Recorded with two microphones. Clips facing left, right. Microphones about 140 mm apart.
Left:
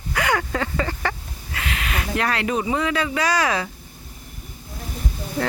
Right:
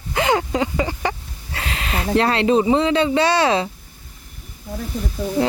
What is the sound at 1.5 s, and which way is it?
Speech, 30° right (ahead or behind).